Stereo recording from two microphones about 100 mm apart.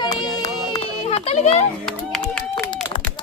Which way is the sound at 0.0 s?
45° left (ahead or behind).